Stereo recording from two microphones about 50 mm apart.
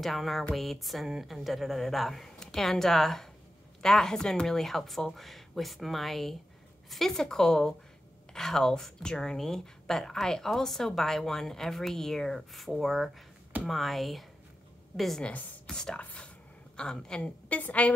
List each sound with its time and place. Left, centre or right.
0.0 s a woman's voice: centre
15.6 s speech: centre
16.0 s speech: left
16.7 s speech: centre
17.5 s a woman's voice: left